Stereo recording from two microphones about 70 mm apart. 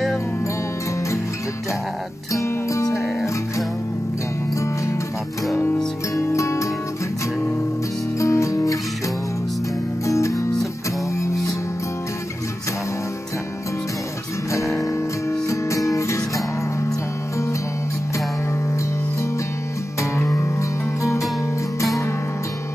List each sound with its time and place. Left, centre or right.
2.3 s music: left
6.1 s music: left
8.2 s music: left
10.0 s music: left
14.5 s music: left
20.0 s music: left